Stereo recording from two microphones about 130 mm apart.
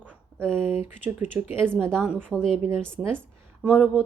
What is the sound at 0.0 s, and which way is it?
Speech, 15° right (ahead or behind).